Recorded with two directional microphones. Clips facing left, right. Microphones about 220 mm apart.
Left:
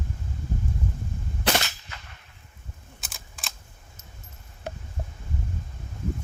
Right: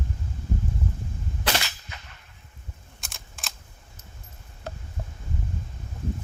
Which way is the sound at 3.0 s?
Centre (ahead or behind).